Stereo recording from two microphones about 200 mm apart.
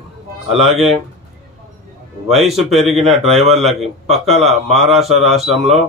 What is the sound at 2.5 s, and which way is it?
Speech, centre (ahead or behind).